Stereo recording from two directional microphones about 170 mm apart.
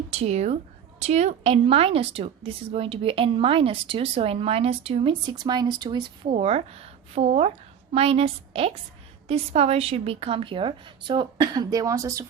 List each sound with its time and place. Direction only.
0.1 s a woman's voice: 40° right (ahead or behind); by 12.2 s 20° right (ahead or behind)